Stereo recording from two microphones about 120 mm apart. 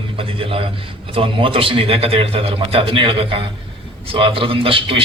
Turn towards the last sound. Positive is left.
turn(degrees=-45)  # may be behind; listen again after turning